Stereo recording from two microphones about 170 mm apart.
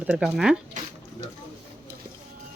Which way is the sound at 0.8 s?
50° right (ahead or behind).